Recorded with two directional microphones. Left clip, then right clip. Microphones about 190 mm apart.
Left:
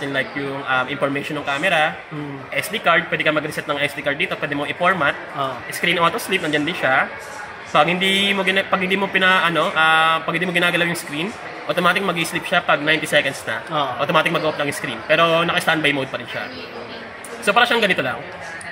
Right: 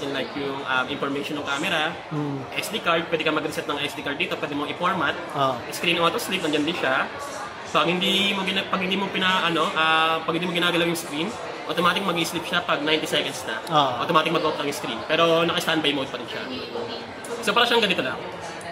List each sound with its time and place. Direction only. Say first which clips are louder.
0.7 s speech: left 5 dB; 25° left (ahead or behind)
5.9 s speech: left 4 dB; 30° left (ahead or behind)
17.5 s speech: left 4 dB; 35° left (ahead or behind)